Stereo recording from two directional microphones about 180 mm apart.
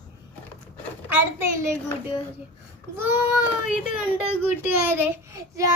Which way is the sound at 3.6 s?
50° left (ahead or behind).